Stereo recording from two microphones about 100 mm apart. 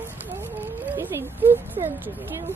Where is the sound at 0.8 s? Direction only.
20° right (ahead or behind).